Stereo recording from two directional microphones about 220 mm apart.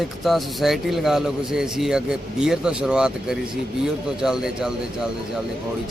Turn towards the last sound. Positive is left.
turn(degrees=-5)  # may be behind; listen again after turning